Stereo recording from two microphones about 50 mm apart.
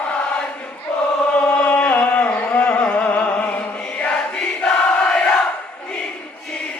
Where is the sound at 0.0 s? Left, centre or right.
Left.